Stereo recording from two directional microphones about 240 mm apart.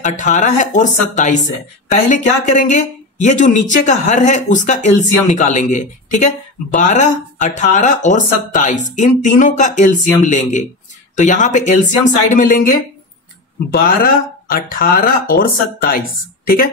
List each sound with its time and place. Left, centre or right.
0.0 s speech: left
13.8 s speech: left